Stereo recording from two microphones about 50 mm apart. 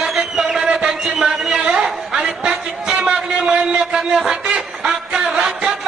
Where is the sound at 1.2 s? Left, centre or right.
Centre.